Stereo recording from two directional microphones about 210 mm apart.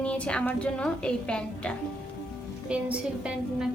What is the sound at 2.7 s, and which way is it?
A woman's voice, 5° right (ahead or behind).